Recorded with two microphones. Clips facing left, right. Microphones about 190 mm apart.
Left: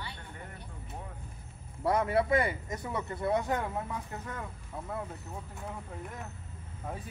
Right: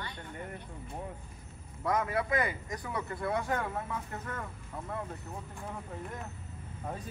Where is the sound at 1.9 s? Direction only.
30° left (ahead or behind).